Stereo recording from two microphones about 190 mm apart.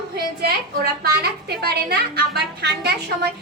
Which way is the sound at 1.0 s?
55° right (ahead or behind).